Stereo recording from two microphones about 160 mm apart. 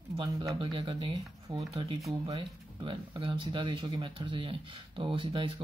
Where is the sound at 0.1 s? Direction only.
30° right (ahead or behind).